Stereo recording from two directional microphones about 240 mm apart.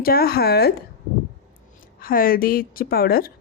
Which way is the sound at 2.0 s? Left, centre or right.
Left.